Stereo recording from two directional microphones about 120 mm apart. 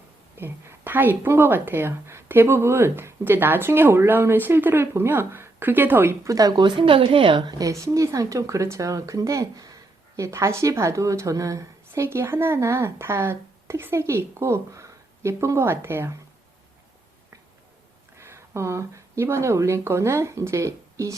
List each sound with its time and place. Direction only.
0.3 s speech: 20° right (ahead or behind); by 7.5 s 40° right (ahead or behind)
7.6 s speech: 25° right (ahead or behind)
18.2 s speech: 20° right (ahead or behind)